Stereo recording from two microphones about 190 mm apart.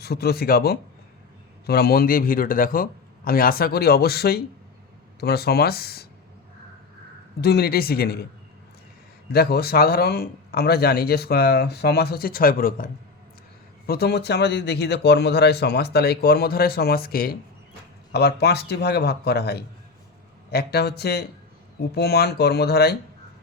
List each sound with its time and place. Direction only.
0.0 s speech: 55° left (ahead or behind)
7.4 s speech: 55° left (ahead or behind)
9.3 s speech: 55° left (ahead or behind)